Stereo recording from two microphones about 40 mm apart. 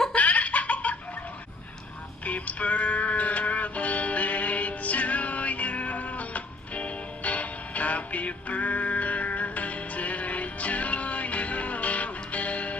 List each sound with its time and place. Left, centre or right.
0.1 s laughter: left
2.2 s music: left